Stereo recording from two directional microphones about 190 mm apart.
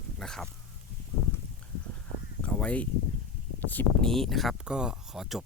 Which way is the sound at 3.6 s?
10° left (ahead or behind).